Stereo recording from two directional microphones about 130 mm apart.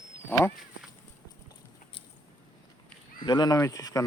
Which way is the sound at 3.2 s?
35° left (ahead or behind).